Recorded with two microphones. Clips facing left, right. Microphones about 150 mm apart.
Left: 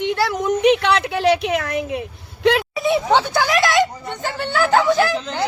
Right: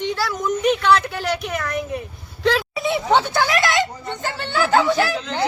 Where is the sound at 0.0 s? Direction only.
60° left (ahead or behind).